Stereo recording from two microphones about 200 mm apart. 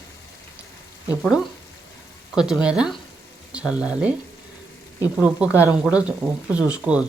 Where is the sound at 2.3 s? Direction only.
5° right (ahead or behind).